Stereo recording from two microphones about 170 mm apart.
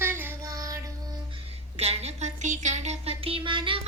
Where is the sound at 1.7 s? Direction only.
40° right (ahead or behind).